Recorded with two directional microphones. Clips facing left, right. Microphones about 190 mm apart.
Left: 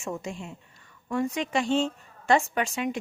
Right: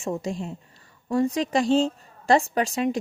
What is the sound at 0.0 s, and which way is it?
A woman's voice, 35° right (ahead or behind).